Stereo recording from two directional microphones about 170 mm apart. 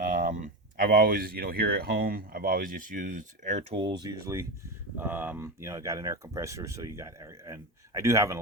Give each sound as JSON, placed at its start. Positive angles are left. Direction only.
{"t": 0.0, "sound": "speech", "side_deg": -50}
{"t": 3.8, "sound": "speech", "side_deg": -30}